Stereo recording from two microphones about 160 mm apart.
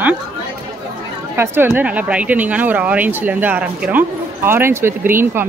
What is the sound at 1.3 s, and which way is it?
Speech, 15° right (ahead or behind).